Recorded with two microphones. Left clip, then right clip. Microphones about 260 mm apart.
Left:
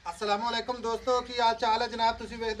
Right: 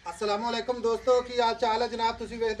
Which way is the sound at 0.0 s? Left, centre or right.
Centre.